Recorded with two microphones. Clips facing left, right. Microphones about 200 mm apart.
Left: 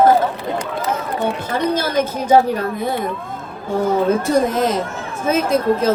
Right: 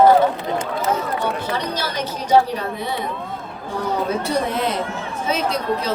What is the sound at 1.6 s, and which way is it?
A woman's voice, 50° left (ahead or behind).